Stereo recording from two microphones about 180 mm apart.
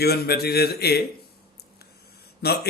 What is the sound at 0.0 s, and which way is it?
A man's voice, 60° left (ahead or behind).